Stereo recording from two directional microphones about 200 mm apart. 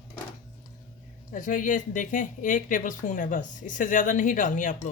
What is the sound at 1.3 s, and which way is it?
Speech, 40° left (ahead or behind).